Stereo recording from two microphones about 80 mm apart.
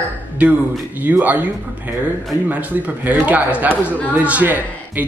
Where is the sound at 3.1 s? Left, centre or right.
Centre.